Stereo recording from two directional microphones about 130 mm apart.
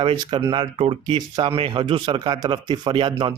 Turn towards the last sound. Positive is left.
turn(degrees=-35)  # may be behind; listen again after turning